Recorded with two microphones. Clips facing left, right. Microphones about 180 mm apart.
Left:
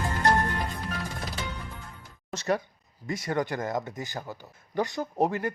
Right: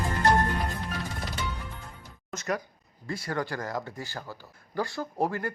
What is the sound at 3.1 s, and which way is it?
Speech, 20° left (ahead or behind).